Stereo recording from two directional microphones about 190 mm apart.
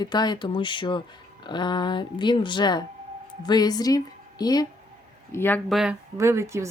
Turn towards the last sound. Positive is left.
turn(degrees=-15)  # may be behind; listen again after turning